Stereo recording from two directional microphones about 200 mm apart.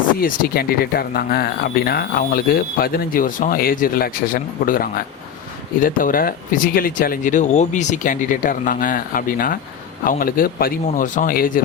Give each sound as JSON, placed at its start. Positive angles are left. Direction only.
{"t": 0.2, "sound": "speech", "side_deg": 45}